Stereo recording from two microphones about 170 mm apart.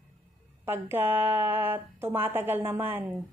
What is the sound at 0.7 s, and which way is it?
A woman's voice, 10° right (ahead or behind).